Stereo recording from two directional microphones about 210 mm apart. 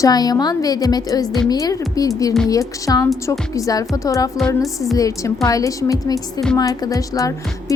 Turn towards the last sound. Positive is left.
turn(degrees=15)  # may be behind; listen again after turning